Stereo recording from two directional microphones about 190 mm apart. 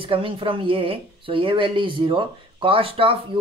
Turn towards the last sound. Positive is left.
turn(degrees=-30)  # may be behind; listen again after turning